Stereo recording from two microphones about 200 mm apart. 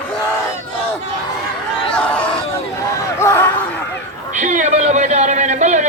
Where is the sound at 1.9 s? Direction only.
5° left (ahead or behind).